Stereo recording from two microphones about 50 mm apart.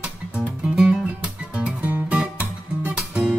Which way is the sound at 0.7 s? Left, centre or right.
Right.